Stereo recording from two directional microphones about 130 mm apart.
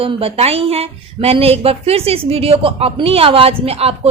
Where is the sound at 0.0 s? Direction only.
45° right (ahead or behind).